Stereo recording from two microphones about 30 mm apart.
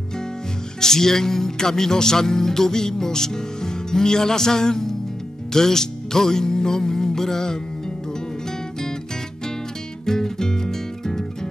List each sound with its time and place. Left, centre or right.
0.7 s speech: centre
5.5 s music: centre
10.0 s music: centre